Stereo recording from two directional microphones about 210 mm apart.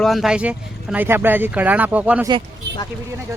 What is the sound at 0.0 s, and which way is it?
Speech, centre (ahead or behind).